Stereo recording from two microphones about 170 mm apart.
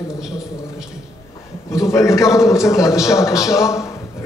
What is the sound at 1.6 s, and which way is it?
A man's voice, 15° left (ahead or behind).